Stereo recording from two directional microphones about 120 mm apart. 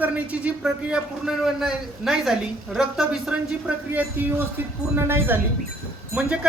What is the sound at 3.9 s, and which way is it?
A man's voice, 15° right (ahead or behind).